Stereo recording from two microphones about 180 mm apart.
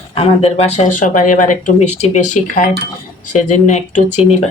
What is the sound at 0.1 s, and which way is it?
Speech, 30° left (ahead or behind).